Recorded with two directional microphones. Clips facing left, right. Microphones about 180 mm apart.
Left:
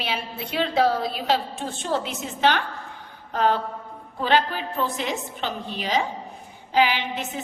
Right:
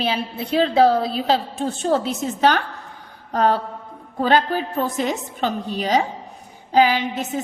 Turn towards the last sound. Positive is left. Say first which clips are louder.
# right 6 dB
turn(degrees=-40)  # may be behind; listen again after turning